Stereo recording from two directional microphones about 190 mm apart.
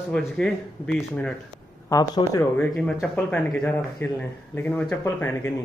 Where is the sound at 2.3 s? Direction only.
5° left (ahead or behind).